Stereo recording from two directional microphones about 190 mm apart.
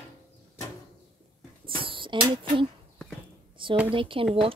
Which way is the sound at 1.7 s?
25° right (ahead or behind).